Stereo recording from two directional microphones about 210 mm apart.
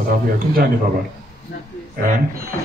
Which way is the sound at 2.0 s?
45° right (ahead or behind).